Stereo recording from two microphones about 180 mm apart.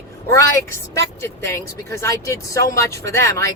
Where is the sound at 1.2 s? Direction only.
15° left (ahead or behind).